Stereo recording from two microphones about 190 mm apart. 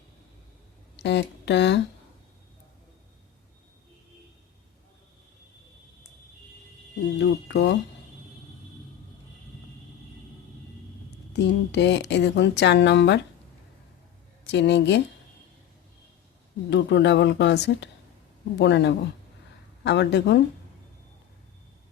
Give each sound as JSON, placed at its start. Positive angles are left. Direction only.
{"t": 0.9, "sound": "speech", "side_deg": 65}
{"t": 7.2, "sound": "a sound", "side_deg": 65}
{"t": 11.3, "sound": "speech", "side_deg": 65}
{"t": 14.4, "sound": "speech", "side_deg": 65}
{"t": 16.6, "sound": "speech", "side_deg": 65}